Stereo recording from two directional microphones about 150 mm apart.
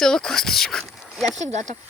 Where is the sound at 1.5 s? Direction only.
55° right (ahead or behind).